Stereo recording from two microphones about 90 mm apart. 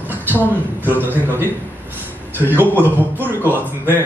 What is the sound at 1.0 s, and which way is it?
Speech, 25° right (ahead or behind).